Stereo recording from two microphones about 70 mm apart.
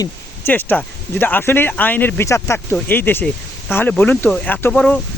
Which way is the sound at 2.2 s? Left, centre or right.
Left.